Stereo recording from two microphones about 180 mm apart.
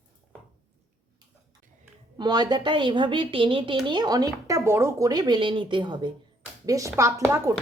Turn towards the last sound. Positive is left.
turn(degrees=-15)  # may be behind; listen again after turning